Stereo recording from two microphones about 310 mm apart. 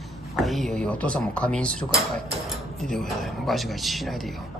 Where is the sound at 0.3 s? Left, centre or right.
Centre.